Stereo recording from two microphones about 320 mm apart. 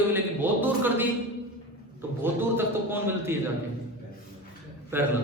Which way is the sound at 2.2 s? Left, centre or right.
Centre.